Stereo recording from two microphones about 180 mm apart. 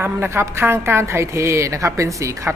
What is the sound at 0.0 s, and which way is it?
A woman's voice, 15° right (ahead or behind).